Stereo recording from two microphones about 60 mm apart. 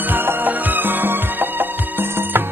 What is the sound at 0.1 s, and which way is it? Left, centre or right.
Music, right.